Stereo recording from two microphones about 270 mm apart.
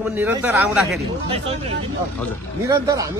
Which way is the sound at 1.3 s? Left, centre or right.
Right.